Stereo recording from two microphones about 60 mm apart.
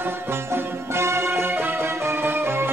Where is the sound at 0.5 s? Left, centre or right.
Right.